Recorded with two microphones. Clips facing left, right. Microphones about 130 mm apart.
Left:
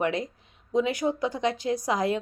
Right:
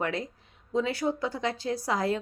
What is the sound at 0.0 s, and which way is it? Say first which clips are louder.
A woman's voice: left 4 dB; 20° left (ahead or behind).